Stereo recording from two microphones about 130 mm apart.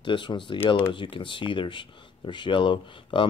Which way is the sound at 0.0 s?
40° left (ahead or behind).